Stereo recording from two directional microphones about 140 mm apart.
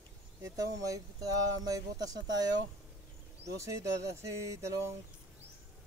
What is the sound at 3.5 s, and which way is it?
Speech, 20° right (ahead or behind).